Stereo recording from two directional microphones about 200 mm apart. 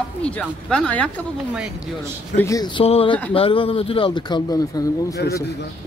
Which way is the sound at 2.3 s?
15° left (ahead or behind).